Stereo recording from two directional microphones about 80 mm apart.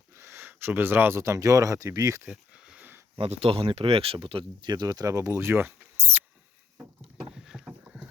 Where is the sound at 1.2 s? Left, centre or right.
Right.